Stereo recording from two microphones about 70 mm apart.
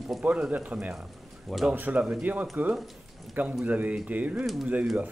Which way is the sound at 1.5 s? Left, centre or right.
Centre.